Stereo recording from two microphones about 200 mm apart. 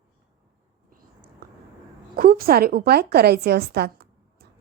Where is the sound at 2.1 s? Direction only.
50° right (ahead or behind).